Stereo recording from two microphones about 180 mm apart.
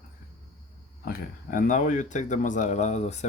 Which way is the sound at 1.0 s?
50° left (ahead or behind).